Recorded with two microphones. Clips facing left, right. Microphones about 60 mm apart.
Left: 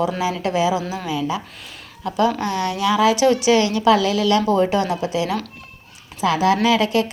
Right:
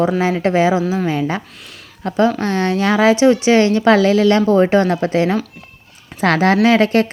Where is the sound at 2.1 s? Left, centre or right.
Right.